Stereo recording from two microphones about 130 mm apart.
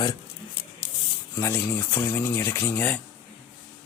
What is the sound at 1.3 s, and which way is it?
Speech, 20° left (ahead or behind).